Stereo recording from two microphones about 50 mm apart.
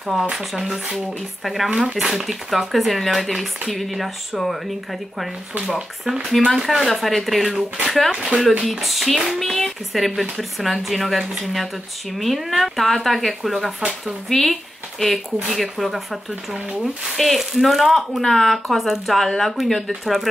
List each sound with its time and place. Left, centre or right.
0.1 s speech: centre
0.6 s speech: centre
1.7 s speech: right
2.0 s speech: centre
8.1 s speech: centre
8.6 s speech: centre